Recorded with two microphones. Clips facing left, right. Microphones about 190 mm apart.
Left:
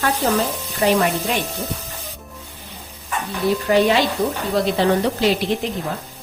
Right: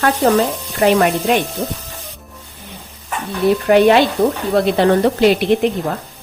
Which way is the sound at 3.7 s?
60° right (ahead or behind).